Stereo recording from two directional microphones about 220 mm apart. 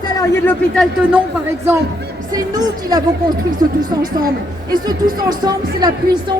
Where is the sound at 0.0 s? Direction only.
15° left (ahead or behind).